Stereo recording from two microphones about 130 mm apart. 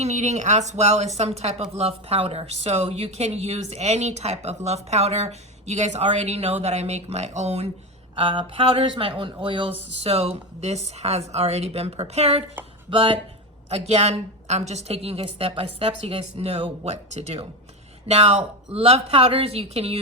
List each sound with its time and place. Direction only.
0.0 s speech: 60° right (ahead or behind)
8.1 s speech: 40° right (ahead or behind)
10.0 s speech: 50° right (ahead or behind)
12.9 s a woman's voice: 40° right (ahead or behind)
13.7 s a woman's voice: 55° right (ahead or behind)